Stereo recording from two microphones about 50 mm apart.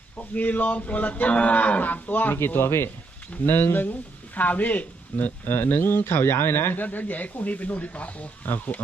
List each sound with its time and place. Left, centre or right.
0.2 s livestock: left
2.6 s speech: left
3.4 s livestock: left
5.5 s speech: left
7.0 s livestock: left